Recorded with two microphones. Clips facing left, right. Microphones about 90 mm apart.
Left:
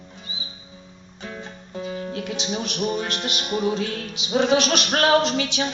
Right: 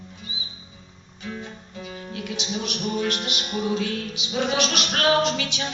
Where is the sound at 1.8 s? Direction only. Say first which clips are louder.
Left 4 dB; 35° left (ahead or behind).